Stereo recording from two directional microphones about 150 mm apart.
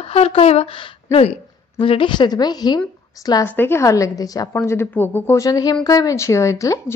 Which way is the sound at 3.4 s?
15° left (ahead or behind).